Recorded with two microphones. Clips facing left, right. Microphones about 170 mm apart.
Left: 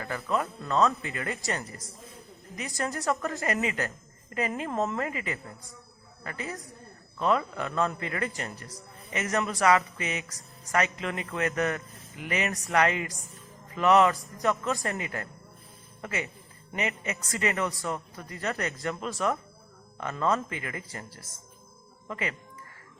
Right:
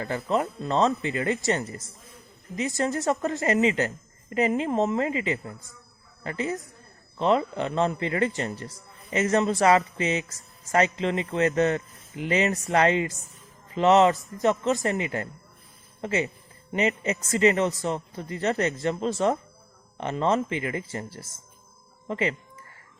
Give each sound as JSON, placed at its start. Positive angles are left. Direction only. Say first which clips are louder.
{"t": 0.0, "sound": "a man's voice", "louder": "right 4 dB", "side_deg": -25}